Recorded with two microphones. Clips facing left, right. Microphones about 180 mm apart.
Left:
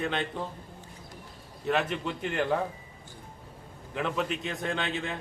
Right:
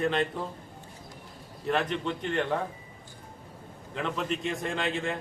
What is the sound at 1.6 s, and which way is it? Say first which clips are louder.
Speech: even; centre (ahead or behind).